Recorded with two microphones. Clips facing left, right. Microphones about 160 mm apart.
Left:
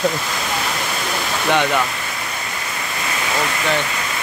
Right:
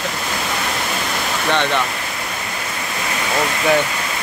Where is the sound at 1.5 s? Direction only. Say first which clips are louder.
Left 2 dB; 10° left (ahead or behind).